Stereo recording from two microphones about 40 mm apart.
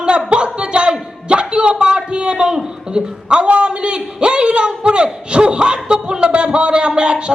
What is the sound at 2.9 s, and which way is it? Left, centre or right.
A man's voice, right.